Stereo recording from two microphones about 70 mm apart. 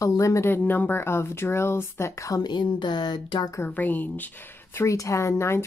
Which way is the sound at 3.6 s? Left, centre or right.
Left.